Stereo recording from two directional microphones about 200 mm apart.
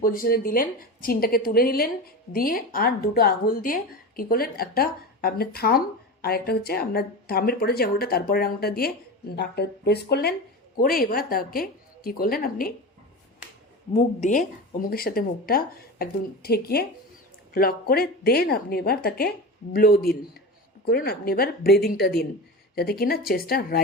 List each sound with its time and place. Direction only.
0.0 s speech: 45° left (ahead or behind)
13.9 s speech: 40° left (ahead or behind)